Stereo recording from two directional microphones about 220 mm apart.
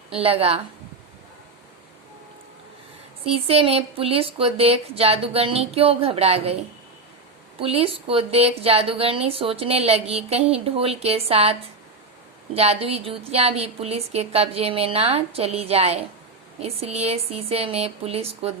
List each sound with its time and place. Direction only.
0.1 s a woman's voice: 25° right (ahead or behind)
3.2 s a woman's voice: 25° right (ahead or behind)
7.6 s a woman's voice: 25° right (ahead or behind)
12.5 s a woman's voice: 25° right (ahead or behind)